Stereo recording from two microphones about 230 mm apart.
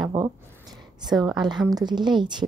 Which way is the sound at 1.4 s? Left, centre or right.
Centre.